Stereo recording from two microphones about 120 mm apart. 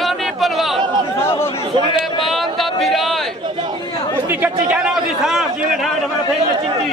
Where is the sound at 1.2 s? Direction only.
20° left (ahead or behind).